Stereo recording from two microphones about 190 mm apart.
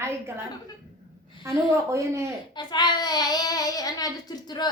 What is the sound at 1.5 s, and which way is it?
Speech, 15° right (ahead or behind).